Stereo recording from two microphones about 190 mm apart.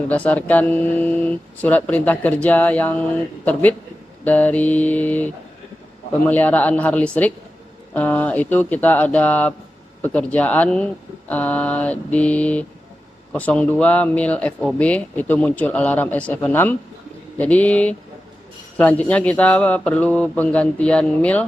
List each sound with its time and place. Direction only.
0.1 s speech: 10° left (ahead or behind)